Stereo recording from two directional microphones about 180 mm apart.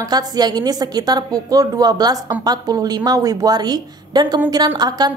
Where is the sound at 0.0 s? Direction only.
20° right (ahead or behind).